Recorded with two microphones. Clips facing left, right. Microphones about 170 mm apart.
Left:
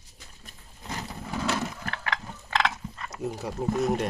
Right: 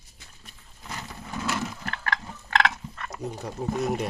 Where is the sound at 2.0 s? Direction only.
60° right (ahead or behind).